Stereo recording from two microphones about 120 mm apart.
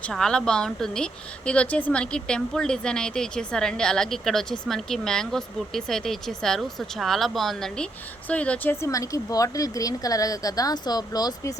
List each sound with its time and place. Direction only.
0.0 s a woman's voice: 5° left (ahead or behind)
8.9 s speech: 30° left (ahead or behind)